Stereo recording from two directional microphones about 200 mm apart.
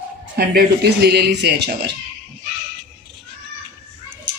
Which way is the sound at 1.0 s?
55° right (ahead or behind).